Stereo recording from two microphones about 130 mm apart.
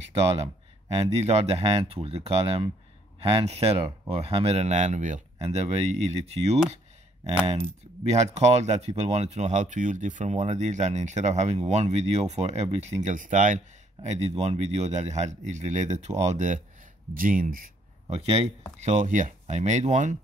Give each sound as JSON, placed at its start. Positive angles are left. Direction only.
{"t": 0.4, "sound": "speech", "side_deg": -55}
{"t": 6.0, "sound": "speech", "side_deg": -55}
{"t": 8.0, "sound": "speech", "side_deg": -60}
{"t": 14.0, "sound": "speech", "side_deg": -60}
{"t": 17.1, "sound": "speech", "side_deg": -90}
{"t": 18.1, "sound": "speech", "side_deg": -55}
{"t": 18.8, "sound": "speech", "side_deg": -65}